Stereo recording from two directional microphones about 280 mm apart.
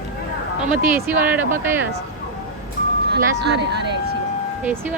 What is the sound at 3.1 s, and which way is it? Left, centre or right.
Speech, right.